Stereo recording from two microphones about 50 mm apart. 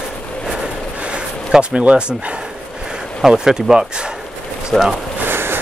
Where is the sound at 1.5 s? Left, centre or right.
Centre.